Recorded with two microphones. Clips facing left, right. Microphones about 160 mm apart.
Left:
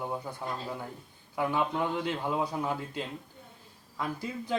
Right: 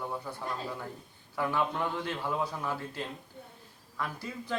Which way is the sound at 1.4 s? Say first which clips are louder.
Left 2 dB; 15° left (ahead or behind).